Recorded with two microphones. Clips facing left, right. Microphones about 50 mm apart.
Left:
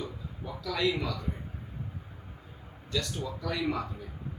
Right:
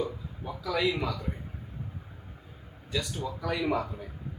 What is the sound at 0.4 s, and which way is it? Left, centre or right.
Speech, centre.